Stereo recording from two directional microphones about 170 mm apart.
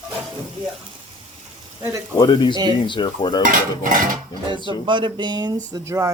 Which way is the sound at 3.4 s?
50° right (ahead or behind).